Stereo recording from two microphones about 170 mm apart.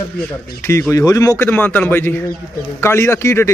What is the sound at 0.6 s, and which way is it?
Speech, 15° left (ahead or behind).